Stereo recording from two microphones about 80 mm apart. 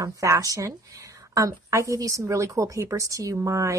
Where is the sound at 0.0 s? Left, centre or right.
Right.